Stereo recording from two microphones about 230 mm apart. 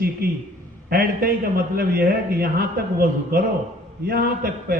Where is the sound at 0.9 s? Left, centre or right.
Right.